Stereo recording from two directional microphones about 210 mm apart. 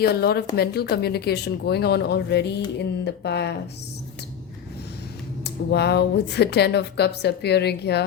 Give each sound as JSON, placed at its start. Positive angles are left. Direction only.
{"t": 0.0, "sound": "speech", "side_deg": 50}
{"t": 5.7, "sound": "speech", "side_deg": 50}